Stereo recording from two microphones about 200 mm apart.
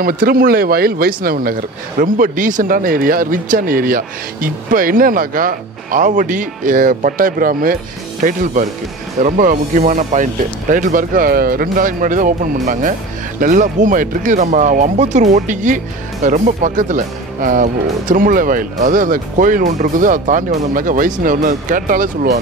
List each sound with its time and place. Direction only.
0.0 s speech: 45° right (ahead or behind)